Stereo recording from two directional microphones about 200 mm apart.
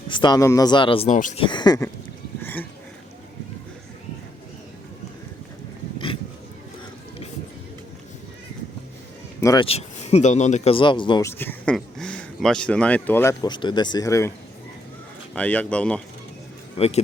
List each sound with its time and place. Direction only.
0.1 s speech: 20° left (ahead or behind)
1.5 s speech: 20° left (ahead or behind)
2.4 s a sound: 10° left (ahead or behind)
9.4 s speech: 15° left (ahead or behind)
9.6 s speech: 30° left (ahead or behind)
11.3 s speech: 10° left (ahead or behind)
16.7 s a man's voice: 30° left (ahead or behind)